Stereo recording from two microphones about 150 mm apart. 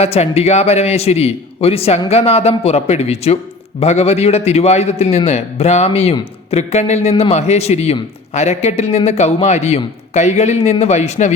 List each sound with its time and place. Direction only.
0.0 s a man's voice: 45° left (ahead or behind)